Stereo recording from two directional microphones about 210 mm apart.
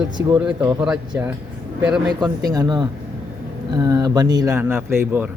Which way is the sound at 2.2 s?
20° right (ahead or behind).